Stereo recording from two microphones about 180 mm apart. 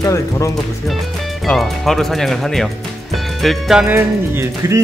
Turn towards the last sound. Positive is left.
turn(degrees=-15)  # may be behind; listen again after turning